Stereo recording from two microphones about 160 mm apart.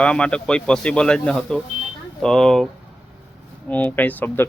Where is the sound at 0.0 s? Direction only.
5° left (ahead or behind).